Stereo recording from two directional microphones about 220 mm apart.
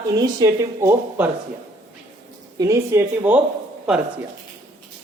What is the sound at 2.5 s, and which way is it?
Speech, 15° right (ahead or behind).